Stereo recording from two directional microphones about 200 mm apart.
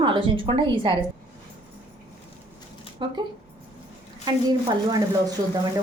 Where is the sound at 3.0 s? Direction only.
25° right (ahead or behind).